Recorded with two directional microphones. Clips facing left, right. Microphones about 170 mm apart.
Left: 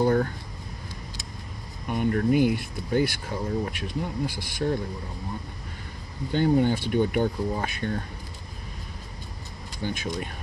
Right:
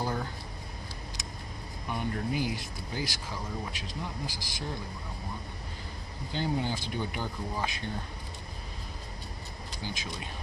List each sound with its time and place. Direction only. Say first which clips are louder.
0.0 s a sound: left 11 dB; 60° left (ahead or behind)
1.9 s speech: left 9 dB; 60° left (ahead or behind)
6.3 s speech: left 10 dB; 55° left (ahead or behind)
9.8 s speech: left 9 dB; 55° left (ahead or behind)